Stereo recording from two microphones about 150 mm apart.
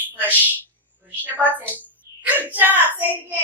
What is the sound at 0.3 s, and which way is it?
A woman's voice, 10° right (ahead or behind).